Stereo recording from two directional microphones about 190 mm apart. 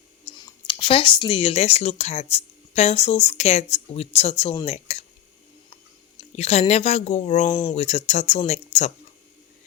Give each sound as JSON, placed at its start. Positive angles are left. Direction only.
{"t": 0.3, "sound": "speech", "side_deg": 25}
{"t": 7.5, "sound": "speech", "side_deg": 30}